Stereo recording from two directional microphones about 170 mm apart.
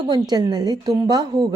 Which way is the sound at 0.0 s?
25° right (ahead or behind).